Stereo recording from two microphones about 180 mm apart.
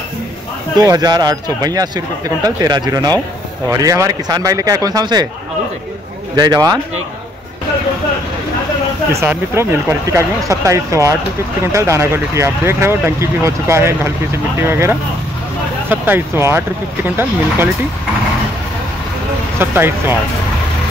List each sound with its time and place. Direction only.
0.7 s speech: 20° right (ahead or behind)
6.3 s speech: 25° right (ahead or behind)
9.1 s speech: 15° right (ahead or behind)
19.6 s speech: 10° right (ahead or behind)